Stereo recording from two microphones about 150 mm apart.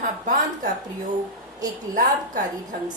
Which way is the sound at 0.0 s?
60° right (ahead or behind).